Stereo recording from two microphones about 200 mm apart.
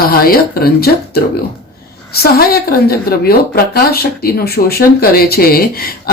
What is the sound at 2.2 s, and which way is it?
A woman's voice, 50° left (ahead or behind).